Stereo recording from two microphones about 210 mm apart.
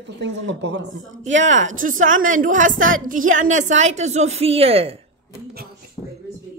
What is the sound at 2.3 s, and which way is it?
A woman's voice, 40° right (ahead or behind).